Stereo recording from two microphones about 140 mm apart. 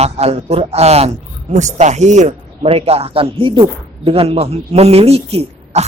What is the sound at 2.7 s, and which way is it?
Speech, 45° right (ahead or behind).